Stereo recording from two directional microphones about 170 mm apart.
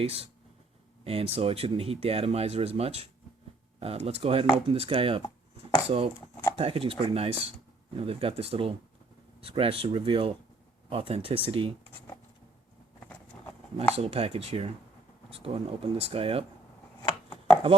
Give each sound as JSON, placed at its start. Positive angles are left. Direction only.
{"t": 0.0, "sound": "speech", "side_deg": -35}
{"t": 6.6, "sound": "speech", "side_deg": -35}
{"t": 13.9, "sound": "speech", "side_deg": -35}
{"t": 17.0, "sound": "chopping", "side_deg": 10}